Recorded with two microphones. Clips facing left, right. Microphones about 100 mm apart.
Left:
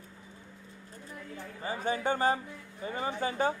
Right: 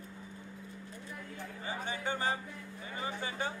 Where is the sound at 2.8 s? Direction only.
35° left (ahead or behind).